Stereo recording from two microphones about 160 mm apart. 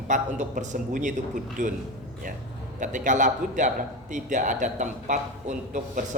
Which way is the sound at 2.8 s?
55° right (ahead or behind).